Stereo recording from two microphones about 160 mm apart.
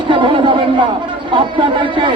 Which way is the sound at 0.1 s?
30° right (ahead or behind).